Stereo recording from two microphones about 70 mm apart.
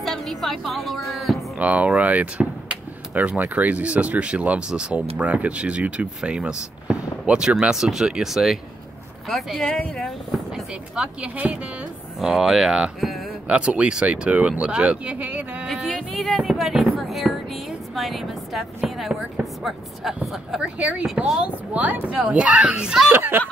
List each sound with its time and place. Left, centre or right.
0.0 s a woman's voice: centre
1.6 s speech: right; by 10.4 s centre
10.5 s speech: centre
15.6 s a sound: centre
19.6 s speech: centre
20.6 s speech: centre
21.0 s speech: centre
21.4 s speech: right
23.0 s speech: right